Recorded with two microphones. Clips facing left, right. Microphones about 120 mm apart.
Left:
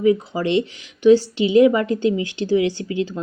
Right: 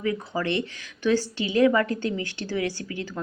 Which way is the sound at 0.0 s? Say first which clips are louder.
Left 9 dB; 20° left (ahead or behind).